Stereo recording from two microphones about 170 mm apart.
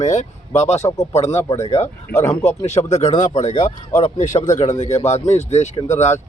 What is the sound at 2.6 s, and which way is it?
Speech, 40° left (ahead or behind).